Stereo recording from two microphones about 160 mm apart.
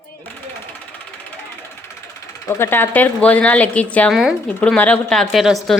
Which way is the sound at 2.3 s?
20° left (ahead or behind).